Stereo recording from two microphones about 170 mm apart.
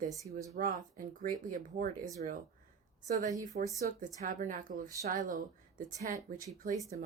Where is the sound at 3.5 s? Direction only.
55° right (ahead or behind).